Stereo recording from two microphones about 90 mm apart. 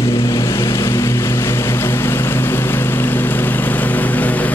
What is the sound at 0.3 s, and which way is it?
Vehicle, 35° left (ahead or behind).